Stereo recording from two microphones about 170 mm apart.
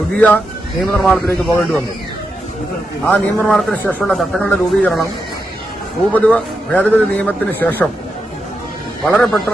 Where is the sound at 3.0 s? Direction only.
5° left (ahead or behind).